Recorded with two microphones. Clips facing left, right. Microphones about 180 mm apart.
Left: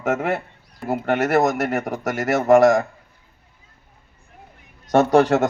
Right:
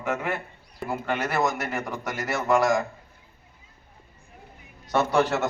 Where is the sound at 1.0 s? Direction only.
70° left (ahead or behind).